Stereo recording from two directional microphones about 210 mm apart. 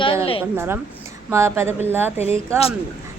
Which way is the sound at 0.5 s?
10° right (ahead or behind).